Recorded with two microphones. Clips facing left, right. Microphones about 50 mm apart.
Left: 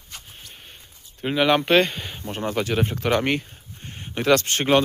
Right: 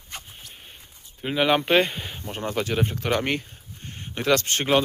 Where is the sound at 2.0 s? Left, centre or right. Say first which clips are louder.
Left 2 dB; centre.